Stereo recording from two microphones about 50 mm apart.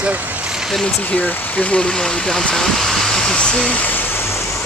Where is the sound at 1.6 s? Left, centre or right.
Left.